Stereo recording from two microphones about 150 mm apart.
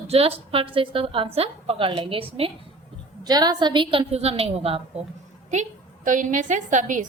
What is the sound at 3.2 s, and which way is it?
A woman's voice, 25° right (ahead or behind).